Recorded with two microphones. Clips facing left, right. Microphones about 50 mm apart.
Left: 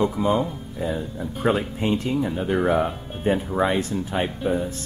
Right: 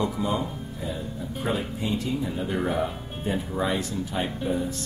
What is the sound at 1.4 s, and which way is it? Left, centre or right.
Speech, left.